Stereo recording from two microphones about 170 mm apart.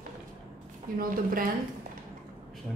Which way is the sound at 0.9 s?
55° right (ahead or behind).